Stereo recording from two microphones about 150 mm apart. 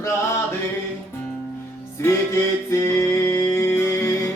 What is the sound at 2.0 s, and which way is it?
Music, 15° left (ahead or behind).